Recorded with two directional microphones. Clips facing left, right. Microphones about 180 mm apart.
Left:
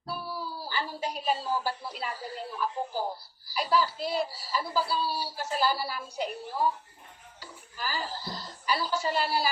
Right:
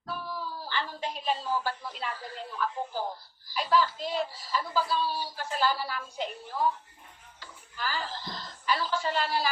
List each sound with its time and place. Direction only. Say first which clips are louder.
0.1 s a sound: even; 10° left (ahead or behind)
1.2 s speech: even; 10° left (ahead or behind)
6.2 s a woman's voice: left 3 dB; 40° left (ahead or behind)
6.5 s speech: even; 10° left (ahead or behind)
7.3 s a sound: right 1 dB; 10° left (ahead or behind)
9.0 s speech: left 2 dB; 10° left (ahead or behind)